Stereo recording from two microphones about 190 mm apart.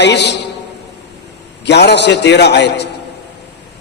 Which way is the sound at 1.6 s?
60° left (ahead or behind).